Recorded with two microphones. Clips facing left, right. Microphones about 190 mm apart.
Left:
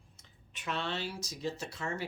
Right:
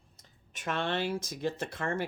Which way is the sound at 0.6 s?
50° right (ahead or behind).